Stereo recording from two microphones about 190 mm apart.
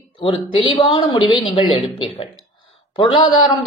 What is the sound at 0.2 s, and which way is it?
A woman's voice, 25° left (ahead or behind).